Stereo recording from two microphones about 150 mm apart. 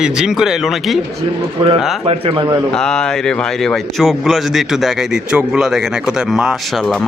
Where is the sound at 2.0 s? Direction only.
40° right (ahead or behind).